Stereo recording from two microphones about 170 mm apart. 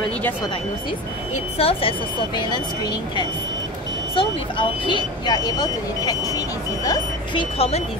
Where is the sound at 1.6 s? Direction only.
35° left (ahead or behind).